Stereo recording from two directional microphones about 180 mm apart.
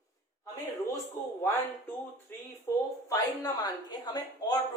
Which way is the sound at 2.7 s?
15° left (ahead or behind).